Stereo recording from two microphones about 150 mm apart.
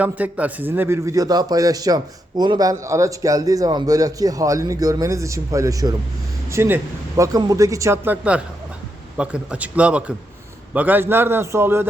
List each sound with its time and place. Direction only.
0.0 s a man's voice: 10° right (ahead or behind)